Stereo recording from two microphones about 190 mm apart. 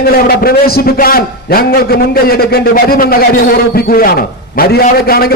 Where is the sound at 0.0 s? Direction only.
50° left (ahead or behind).